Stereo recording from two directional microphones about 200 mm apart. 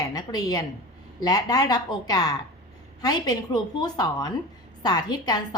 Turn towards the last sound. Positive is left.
turn(degrees=20)  # may be behind; listen again after turning